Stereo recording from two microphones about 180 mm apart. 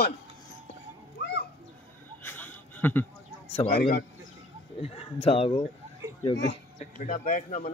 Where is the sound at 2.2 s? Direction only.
10° left (ahead or behind).